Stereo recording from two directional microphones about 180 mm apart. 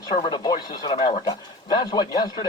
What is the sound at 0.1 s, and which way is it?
Speech, 25° left (ahead or behind).